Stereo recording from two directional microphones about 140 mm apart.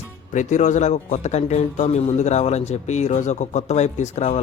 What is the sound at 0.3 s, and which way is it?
A man's voice, 60° left (ahead or behind).